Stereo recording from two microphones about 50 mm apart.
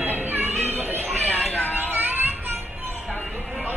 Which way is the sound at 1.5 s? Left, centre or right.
Left.